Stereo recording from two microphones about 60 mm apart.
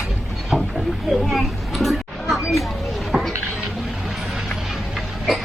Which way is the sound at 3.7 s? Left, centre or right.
Centre.